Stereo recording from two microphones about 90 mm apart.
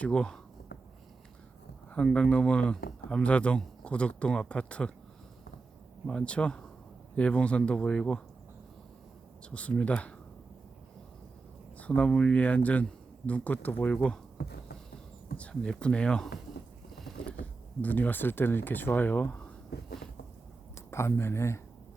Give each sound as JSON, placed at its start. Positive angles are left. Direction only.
{"t": 0.0, "sound": "speech", "side_deg": 10}
{"t": 2.1, "sound": "speech", "side_deg": 10}
{"t": 6.1, "sound": "speech", "side_deg": 10}
{"t": 9.4, "sound": "speech", "side_deg": 15}
{"t": 11.8, "sound": "speech", "side_deg": 15}
{"t": 17.0, "sound": "a sound", "side_deg": 0}
{"t": 17.4, "sound": "speech", "side_deg": 20}
{"t": 20.9, "sound": "speech", "side_deg": 30}